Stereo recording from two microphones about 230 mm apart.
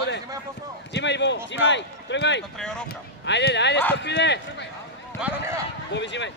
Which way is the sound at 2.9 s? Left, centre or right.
Left.